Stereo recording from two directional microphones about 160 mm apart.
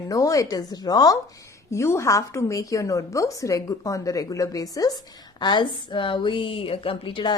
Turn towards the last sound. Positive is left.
turn(degrees=30)  # may be behind; listen again after turning